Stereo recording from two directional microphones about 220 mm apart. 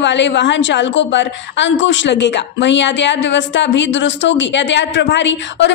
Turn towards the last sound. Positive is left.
turn(degrees=55)  # may be behind; listen again after turning